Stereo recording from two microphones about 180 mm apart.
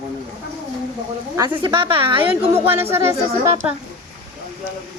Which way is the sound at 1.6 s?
30° right (ahead or behind).